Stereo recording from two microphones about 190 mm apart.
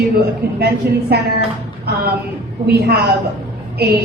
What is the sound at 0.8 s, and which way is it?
Speech, 55° right (ahead or behind).